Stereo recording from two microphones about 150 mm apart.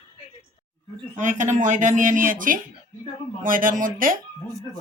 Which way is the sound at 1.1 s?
55° right (ahead or behind).